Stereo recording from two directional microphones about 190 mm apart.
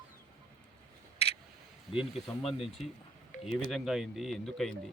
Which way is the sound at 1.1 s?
30° left (ahead or behind).